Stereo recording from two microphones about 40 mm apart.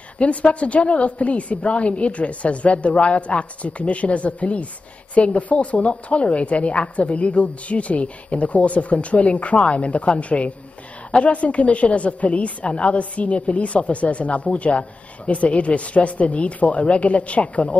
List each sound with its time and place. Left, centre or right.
0.2 s a woman's voice: left